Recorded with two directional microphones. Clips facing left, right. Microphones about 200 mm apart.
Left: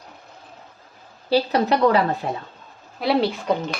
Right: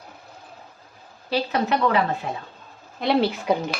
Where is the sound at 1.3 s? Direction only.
35° left (ahead or behind).